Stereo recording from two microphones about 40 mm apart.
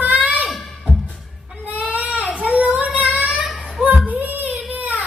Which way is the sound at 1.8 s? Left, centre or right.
Right.